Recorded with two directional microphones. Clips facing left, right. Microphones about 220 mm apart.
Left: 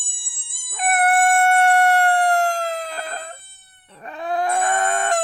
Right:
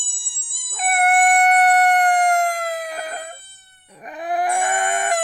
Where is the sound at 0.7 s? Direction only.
Centre (ahead or behind).